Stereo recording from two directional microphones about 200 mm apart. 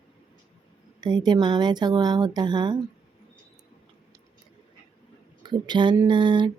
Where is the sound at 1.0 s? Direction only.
20° right (ahead or behind).